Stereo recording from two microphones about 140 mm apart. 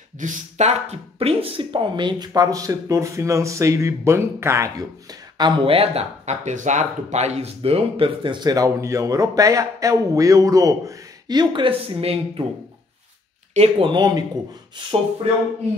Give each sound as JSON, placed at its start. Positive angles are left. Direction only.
{"t": 0.2, "sound": "speech", "side_deg": -60}
{"t": 5.4, "sound": "speech", "side_deg": -45}
{"t": 13.6, "sound": "speech", "side_deg": -40}